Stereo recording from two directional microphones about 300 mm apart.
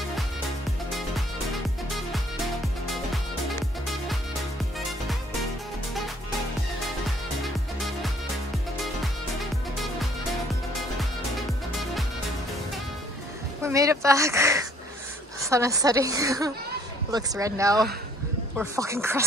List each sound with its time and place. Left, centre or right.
7.4 s music: centre
13.6 s a woman's voice: centre